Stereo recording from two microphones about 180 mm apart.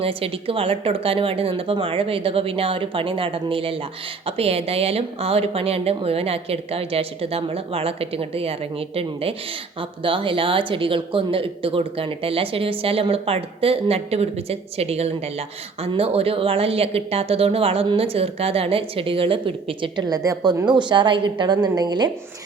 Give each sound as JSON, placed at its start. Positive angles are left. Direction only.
{"t": 0.0, "sound": "speech", "side_deg": -30}
{"t": 10.0, "sound": "speech", "side_deg": -30}